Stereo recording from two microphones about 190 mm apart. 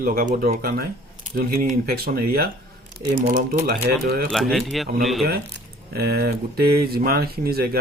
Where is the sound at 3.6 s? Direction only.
55° right (ahead or behind).